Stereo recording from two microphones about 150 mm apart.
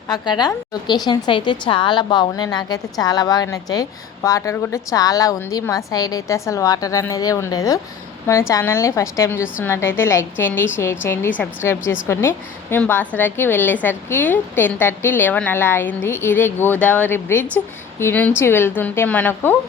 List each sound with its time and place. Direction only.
0.1 s a woman's voice: 30° left (ahead or behind)